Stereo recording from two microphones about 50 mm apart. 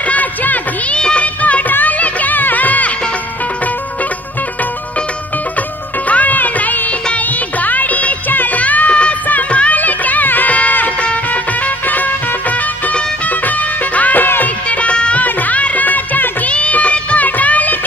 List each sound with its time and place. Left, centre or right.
0.0 s music: left
0.9 s music of bollywood: left
5.6 s music of bollywood: left
11.0 s music: left
14.7 s music of bollywood: left
15.2 s music: left